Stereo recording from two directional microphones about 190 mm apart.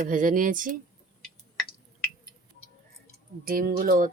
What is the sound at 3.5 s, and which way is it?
Speech, 50° right (ahead or behind).